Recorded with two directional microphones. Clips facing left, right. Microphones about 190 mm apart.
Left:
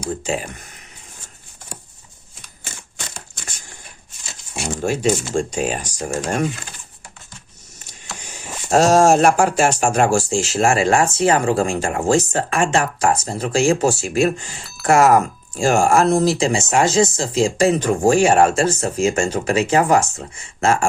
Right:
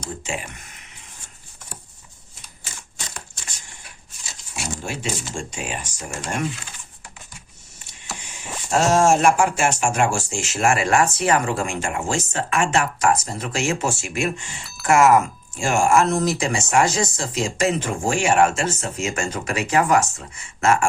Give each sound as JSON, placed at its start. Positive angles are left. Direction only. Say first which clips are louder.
{"t": 0.3, "sound": "speech", "louder": "left 6 dB", "side_deg": 35}
{"t": 4.9, "sound": "speech", "louder": "left 13 dB", "side_deg": 45}
{"t": 8.7, "sound": "speech", "louder": "left 4 dB", "side_deg": 40}